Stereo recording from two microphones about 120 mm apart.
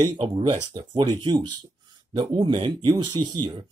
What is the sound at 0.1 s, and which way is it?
Speech, 45° right (ahead or behind).